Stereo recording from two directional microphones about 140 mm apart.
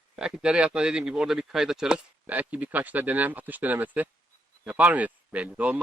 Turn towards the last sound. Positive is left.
turn(degrees=-10)  # may be behind; listen again after turning